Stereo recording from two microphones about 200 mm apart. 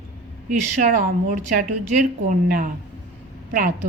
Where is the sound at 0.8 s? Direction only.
40° right (ahead or behind).